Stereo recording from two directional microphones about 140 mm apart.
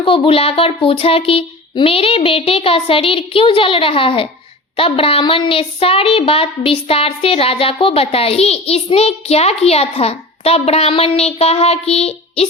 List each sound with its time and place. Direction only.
0.0 s speech: 40° left (ahead or behind)